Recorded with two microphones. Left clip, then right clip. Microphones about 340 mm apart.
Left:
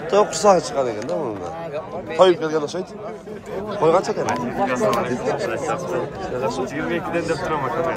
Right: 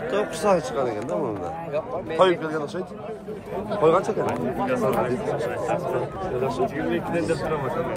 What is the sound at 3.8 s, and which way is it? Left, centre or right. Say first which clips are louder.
Speech: left 2 dB; centre.